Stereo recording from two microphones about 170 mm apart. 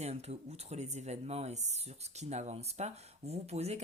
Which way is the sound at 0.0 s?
40° right (ahead or behind).